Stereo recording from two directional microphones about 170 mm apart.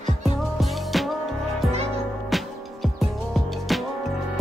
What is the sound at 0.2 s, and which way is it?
Music, centre (ahead or behind).